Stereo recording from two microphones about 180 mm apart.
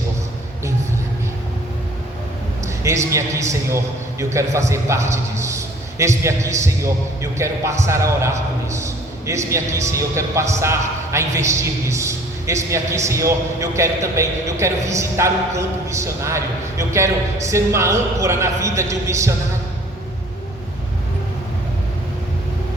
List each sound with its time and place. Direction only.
2.6 s a man's voice: 15° right (ahead or behind)